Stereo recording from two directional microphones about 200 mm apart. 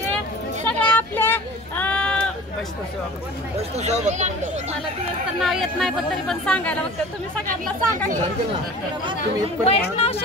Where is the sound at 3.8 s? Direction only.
35° right (ahead or behind).